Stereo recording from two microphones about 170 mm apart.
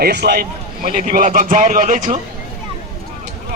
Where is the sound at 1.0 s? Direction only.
50° right (ahead or behind).